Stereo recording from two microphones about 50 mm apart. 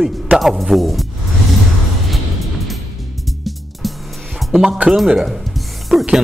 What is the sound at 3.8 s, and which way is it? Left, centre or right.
Music, centre.